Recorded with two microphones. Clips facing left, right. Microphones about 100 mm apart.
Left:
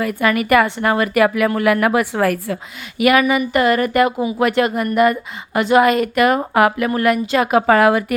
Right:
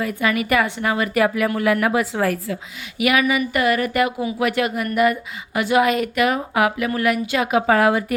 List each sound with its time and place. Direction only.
0.0 s a woman's voice: 60° left (ahead or behind)
3.0 s speech: 45° left (ahead or behind); by 8.0 s 70° left (ahead or behind)